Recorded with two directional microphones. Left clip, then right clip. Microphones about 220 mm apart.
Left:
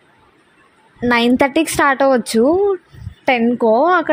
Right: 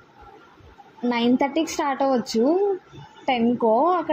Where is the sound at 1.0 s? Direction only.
50° left (ahead or behind).